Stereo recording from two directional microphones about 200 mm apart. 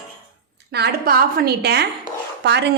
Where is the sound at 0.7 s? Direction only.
50° right (ahead or behind).